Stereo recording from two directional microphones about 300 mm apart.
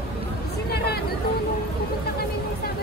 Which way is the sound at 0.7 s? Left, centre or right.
Left.